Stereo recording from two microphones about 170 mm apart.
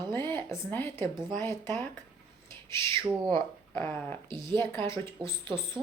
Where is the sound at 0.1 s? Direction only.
15° left (ahead or behind).